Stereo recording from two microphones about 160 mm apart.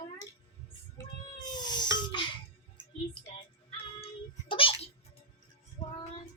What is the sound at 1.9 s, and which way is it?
Music, 30° left (ahead or behind).